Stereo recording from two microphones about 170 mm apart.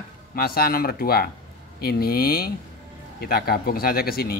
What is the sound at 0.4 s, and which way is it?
A man's voice, 60° left (ahead or behind).